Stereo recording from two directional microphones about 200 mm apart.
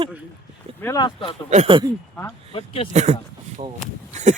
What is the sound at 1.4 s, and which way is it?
Speech, 30° right (ahead or behind).